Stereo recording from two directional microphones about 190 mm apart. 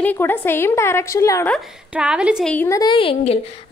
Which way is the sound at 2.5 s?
15° left (ahead or behind).